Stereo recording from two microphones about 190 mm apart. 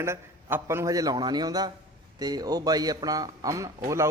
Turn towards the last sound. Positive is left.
turn(degrees=-15)  # may be behind; listen again after turning